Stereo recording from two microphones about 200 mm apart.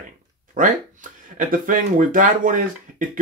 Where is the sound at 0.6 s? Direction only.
45° right (ahead or behind).